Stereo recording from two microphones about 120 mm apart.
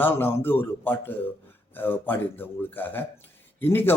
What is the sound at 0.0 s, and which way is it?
Speech, 20° left (ahead or behind).